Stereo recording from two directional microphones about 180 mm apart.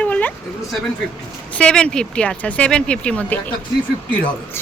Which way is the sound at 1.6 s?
5° left (ahead or behind).